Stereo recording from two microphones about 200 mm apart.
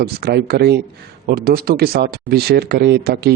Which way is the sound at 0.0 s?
55° right (ahead or behind).